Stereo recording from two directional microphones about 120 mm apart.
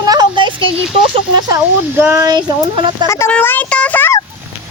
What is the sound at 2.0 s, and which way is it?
Speech, 20° right (ahead or behind).